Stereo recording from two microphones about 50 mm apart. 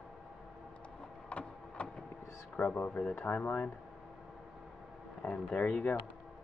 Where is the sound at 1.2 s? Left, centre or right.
Left.